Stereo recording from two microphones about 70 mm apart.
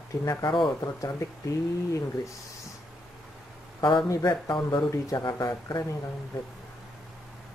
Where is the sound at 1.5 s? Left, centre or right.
Left.